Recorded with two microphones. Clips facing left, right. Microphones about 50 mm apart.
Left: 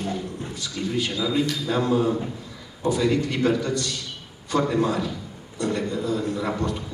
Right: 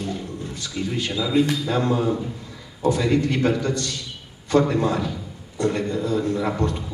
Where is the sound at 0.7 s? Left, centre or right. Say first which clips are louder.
Right 1 dB; centre.